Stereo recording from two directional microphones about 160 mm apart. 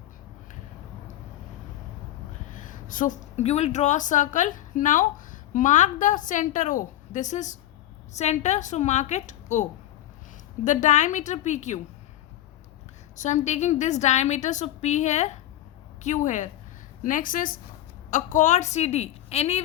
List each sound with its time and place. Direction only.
2.5 s a woman's voice: 55° left (ahead or behind)
13.1 s a woman's voice: 50° left (ahead or behind)